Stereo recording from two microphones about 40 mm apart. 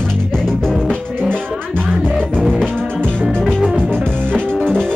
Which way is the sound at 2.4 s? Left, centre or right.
Centre.